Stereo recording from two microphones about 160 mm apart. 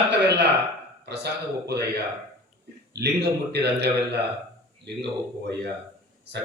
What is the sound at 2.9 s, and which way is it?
A man's voice, 90° right.